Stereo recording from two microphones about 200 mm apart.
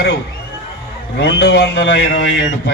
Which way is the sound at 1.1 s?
60° left (ahead or behind).